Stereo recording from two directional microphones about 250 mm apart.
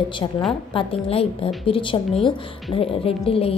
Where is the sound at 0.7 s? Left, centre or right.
Left.